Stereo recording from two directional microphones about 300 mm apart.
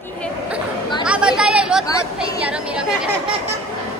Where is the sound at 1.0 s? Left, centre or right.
Centre.